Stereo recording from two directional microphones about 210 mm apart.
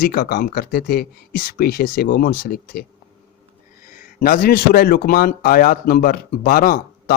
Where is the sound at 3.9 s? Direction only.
40° left (ahead or behind).